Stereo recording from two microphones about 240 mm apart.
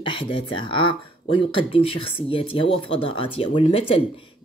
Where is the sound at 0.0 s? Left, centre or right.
Left.